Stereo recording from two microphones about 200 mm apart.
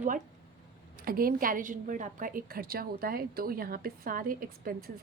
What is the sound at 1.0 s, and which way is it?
A woman's voice, 45° right (ahead or behind).